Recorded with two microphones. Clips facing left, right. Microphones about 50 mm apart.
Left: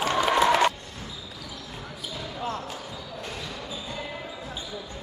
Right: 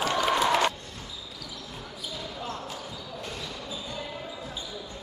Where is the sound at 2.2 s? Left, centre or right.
Left.